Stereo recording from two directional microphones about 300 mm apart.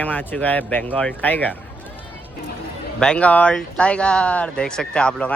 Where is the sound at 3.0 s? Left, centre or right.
Centre.